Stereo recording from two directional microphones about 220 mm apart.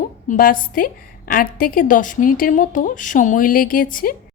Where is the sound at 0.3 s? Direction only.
40° left (ahead or behind).